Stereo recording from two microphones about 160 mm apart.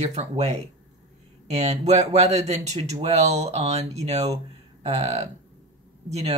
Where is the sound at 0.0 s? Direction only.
45° right (ahead or behind).